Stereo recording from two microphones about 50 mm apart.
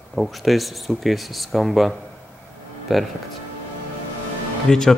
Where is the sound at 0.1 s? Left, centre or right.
Centre.